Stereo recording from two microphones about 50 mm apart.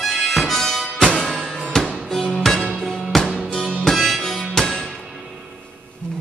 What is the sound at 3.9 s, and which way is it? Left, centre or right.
Harmonica, centre.